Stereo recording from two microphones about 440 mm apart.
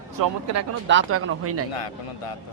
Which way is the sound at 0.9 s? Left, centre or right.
Right.